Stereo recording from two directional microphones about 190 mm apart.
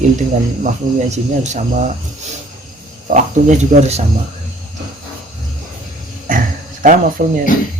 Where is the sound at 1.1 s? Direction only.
40° right (ahead or behind).